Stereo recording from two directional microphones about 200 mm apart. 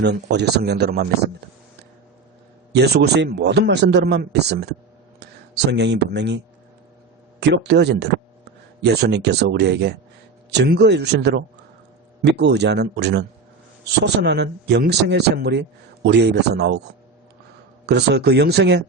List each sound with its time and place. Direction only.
0.0 s speech: 55° right (ahead or behind)
2.7 s speech: 55° right (ahead or behind)
17.8 s speech: 55° right (ahead or behind)